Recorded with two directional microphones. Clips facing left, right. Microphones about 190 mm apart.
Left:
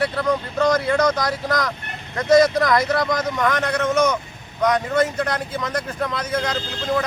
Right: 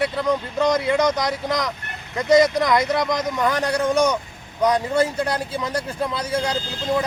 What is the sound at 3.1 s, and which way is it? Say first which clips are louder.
Speech: even; 20° right (ahead or behind).